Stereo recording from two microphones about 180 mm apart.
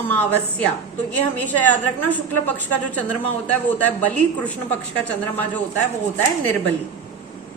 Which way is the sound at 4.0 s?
10° left (ahead or behind).